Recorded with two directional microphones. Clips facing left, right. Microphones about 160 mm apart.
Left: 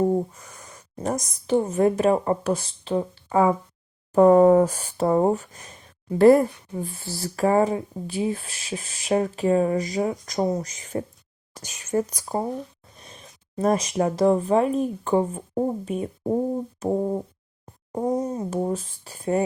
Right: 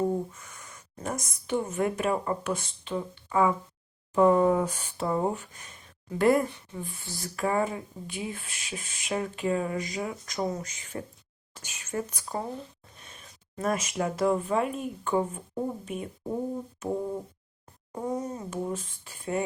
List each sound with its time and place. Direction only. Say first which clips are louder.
0.3 s a woman's voice: left 3 dB; 35° left (ahead or behind)
13.6 s speech: left 7 dB; 35° left (ahead or behind)